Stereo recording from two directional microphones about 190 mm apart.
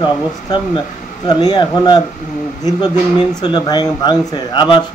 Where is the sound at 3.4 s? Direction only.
25° left (ahead or behind).